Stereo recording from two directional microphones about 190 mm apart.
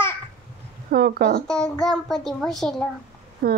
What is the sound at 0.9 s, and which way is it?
Speech, 55° right (ahead or behind).